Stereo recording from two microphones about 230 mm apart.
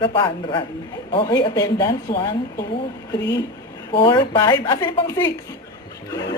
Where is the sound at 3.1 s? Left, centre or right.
Left.